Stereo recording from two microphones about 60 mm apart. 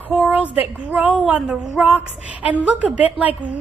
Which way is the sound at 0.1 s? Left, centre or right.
Right.